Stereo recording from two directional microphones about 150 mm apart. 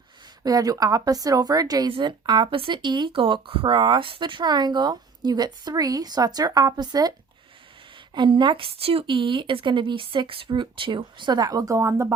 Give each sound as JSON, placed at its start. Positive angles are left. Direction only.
{"t": 0.4, "sound": "a woman's voice", "side_deg": -25}
{"t": 8.1, "sound": "speech", "side_deg": -30}